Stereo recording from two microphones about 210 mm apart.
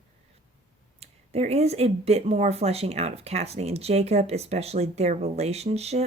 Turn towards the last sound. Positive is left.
turn(degrees=-30)  # may be behind; listen again after turning